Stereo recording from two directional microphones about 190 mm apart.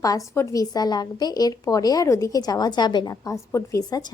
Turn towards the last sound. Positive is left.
turn(degrees=20)  # may be behind; listen again after turning